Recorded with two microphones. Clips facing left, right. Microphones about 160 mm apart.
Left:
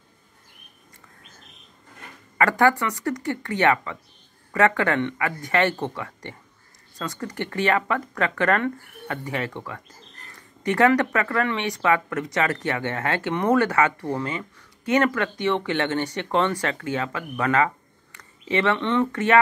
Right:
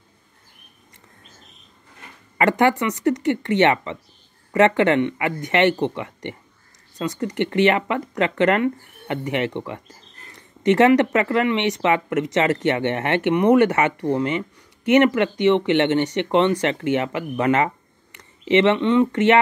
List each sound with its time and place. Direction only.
2.3 s speech: 20° right (ahead or behind)